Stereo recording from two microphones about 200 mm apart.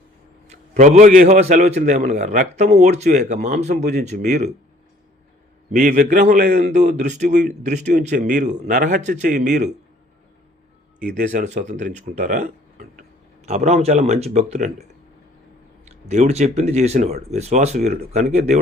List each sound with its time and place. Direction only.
0.4 s a man's voice: 35° right (ahead or behind)
5.7 s a man's voice: 45° right (ahead or behind)
11.2 s a man's voice: 40° right (ahead or behind)
13.0 s speech: 35° right (ahead or behind)
16.0 s a man's voice: 35° right (ahead or behind)